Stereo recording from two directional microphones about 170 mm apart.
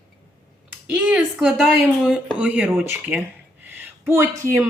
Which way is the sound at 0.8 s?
10° right (ahead or behind).